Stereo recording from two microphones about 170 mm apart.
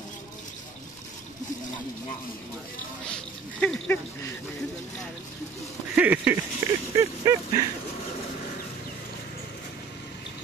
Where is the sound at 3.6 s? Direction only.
5° left (ahead or behind).